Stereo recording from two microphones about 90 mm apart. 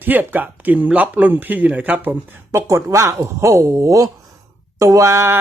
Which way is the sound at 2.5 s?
35° right (ahead or behind).